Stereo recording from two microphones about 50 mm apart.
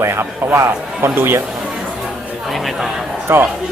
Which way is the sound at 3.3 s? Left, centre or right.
Right.